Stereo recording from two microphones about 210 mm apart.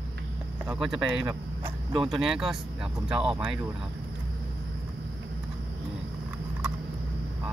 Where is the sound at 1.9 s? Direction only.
25° right (ahead or behind).